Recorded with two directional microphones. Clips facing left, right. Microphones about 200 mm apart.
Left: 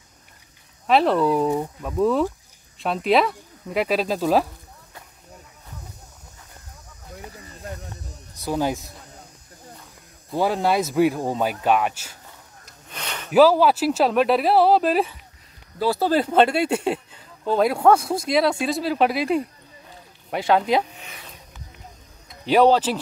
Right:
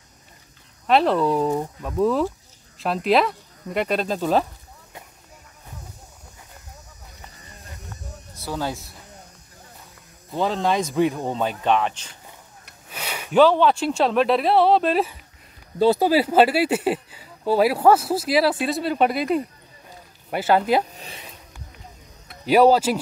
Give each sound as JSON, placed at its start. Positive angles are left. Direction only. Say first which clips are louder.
{"t": 0.8, "sound": "speech", "louder": "even", "side_deg": 0}
{"t": 8.4, "sound": "speech", "louder": "left 4 dB", "side_deg": 15}
{"t": 10.3, "sound": "speech", "louder": "left 1 dB", "side_deg": 10}
{"t": 12.9, "sound": "a sound", "louder": "right 1 dB", "side_deg": -10}
{"t": 13.3, "sound": "speech", "louder": "left 1 dB", "side_deg": 5}
{"t": 15.8, "sound": "speech", "louder": "right 4 dB", "side_deg": -20}
{"t": 16.1, "sound": "speech", "louder": "right 1 dB", "side_deg": -5}
{"t": 20.9, "sound": "a sound", "louder": "right 2 dB", "side_deg": -35}
{"t": 22.4, "sound": "speech", "louder": "right 1 dB", "side_deg": -10}